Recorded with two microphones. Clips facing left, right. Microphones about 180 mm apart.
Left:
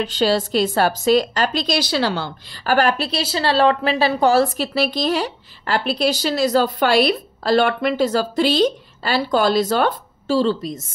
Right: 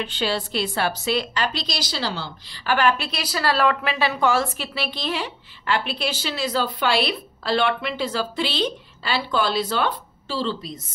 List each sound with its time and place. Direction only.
0.0 s a woman's voice: 40° left (ahead or behind)